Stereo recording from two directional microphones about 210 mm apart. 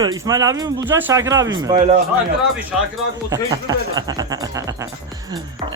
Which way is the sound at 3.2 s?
15° right (ahead or behind).